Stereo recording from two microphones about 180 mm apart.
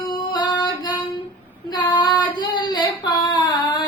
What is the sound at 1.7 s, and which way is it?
Child singing, 25° left (ahead or behind).